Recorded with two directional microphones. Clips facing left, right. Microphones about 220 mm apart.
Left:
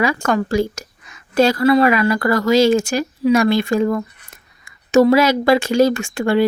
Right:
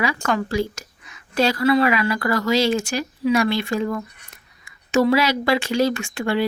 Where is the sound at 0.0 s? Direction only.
45° left (ahead or behind).